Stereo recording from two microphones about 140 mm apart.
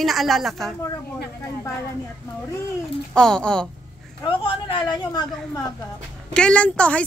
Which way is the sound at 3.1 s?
5° left (ahead or behind).